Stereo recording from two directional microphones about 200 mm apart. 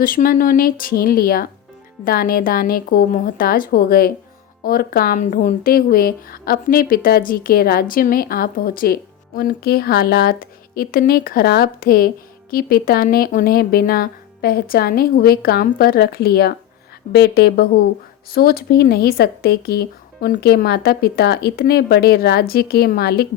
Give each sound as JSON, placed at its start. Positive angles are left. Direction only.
{"t": 0.0, "sound": "speech", "side_deg": 45}